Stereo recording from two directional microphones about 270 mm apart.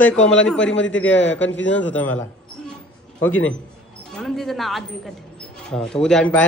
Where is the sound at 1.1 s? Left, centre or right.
Left.